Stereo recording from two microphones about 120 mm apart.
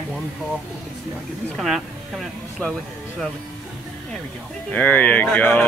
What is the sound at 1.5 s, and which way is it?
Speech, centre (ahead or behind).